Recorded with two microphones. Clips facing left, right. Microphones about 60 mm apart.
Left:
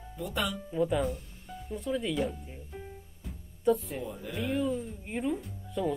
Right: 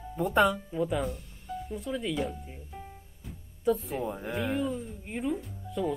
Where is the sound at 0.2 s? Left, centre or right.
Right.